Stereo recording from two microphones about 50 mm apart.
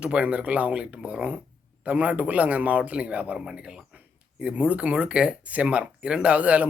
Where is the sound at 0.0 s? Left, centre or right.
Right.